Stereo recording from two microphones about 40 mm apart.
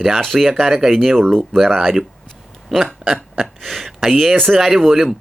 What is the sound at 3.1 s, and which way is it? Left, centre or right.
Speech, centre.